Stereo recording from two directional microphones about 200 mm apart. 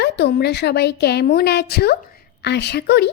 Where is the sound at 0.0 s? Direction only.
55° left (ahead or behind).